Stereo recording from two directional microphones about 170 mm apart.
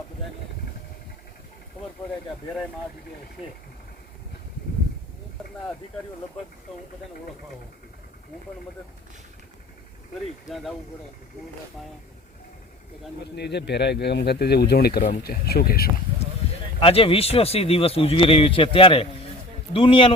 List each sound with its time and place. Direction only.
10.5 s speech: centre (ahead or behind)
13.3 s speech: 80° left; by 15.9 s 60° left (ahead or behind)
16.8 s speech: 35° left (ahead or behind)